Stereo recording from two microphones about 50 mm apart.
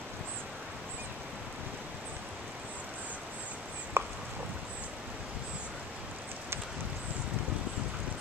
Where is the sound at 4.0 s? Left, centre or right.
Right.